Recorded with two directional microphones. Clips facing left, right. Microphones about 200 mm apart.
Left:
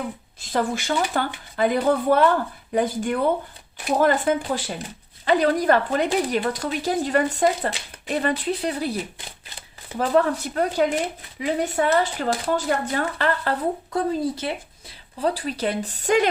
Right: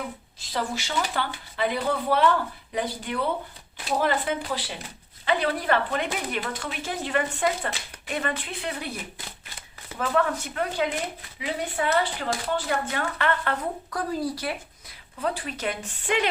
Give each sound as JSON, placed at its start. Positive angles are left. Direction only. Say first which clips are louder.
{"t": 0.5, "sound": "a woman's voice", "louder": "left 5 dB", "side_deg": 50}
{"t": 14.1, "sound": "speech", "louder": "left 4 dB", "side_deg": 25}
{"t": 15.2, "sound": "a woman's voice", "louder": "left 5 dB", "side_deg": 35}